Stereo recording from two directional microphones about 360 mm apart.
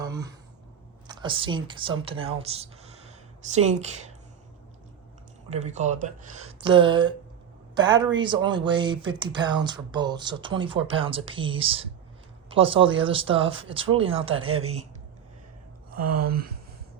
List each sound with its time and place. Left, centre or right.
0.0 s a sound: centre
1.0 s a woman's voice: centre
5.5 s speech: centre
16.2 s speech: right